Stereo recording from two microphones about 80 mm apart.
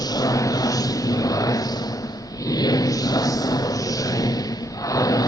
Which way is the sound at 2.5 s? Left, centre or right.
Left.